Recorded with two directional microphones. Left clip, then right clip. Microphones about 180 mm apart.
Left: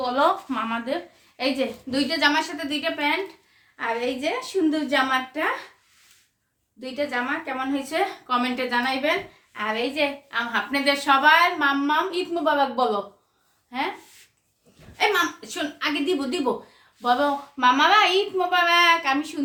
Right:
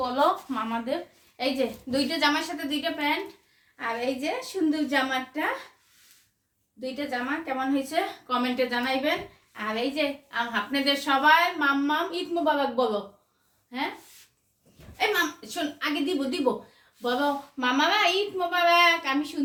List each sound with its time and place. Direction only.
0.2 s a woman's voice: 20° left (ahead or behind)
1.4 s a woman's voice: 10° left (ahead or behind)
6.8 s a woman's voice: 20° left (ahead or behind)
14.9 s a woman's voice: 20° left (ahead or behind)